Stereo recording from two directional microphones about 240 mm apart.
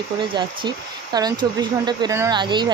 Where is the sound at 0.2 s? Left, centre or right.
Centre.